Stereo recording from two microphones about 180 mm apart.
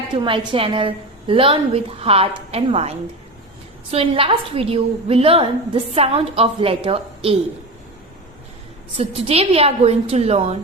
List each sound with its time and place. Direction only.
0.2 s a woman's voice: 30° right (ahead or behind)
3.9 s a woman's voice: 30° right (ahead or behind)
9.0 s a woman's voice: 35° right (ahead or behind)